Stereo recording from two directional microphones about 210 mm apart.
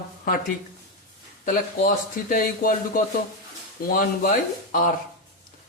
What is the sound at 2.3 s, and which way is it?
A man's voice, 45° left (ahead or behind).